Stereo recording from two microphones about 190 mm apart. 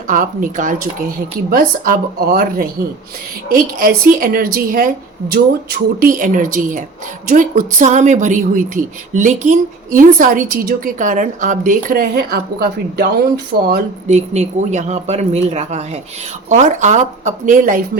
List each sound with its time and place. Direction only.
0.1 s speech: 45° right (ahead or behind)
6.0 s speech: 45° right (ahead or behind)
14.1 s speech: 35° right (ahead or behind)